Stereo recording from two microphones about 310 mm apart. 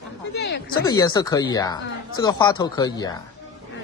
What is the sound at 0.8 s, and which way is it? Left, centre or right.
Speech, centre.